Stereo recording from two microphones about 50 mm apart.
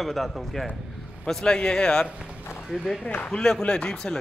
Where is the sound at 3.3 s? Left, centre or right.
Centre.